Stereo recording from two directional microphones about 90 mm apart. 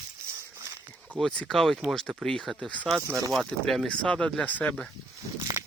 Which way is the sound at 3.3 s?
Centre (ahead or behind).